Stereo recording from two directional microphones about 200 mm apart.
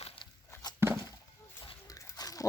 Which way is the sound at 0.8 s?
10° right (ahead or behind).